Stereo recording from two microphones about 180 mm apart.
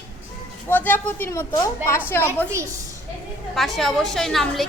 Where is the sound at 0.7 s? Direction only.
10° left (ahead or behind).